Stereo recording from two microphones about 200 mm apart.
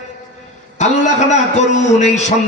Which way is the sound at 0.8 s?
35° left (ahead or behind).